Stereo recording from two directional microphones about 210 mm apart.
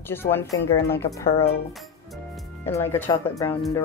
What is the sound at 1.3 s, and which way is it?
Speech, 30° left (ahead or behind).